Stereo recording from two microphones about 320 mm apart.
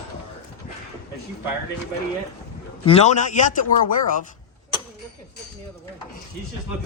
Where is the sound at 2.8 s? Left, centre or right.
Centre.